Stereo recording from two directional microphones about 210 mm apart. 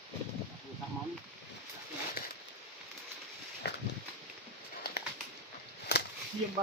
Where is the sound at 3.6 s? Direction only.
50° left (ahead or behind).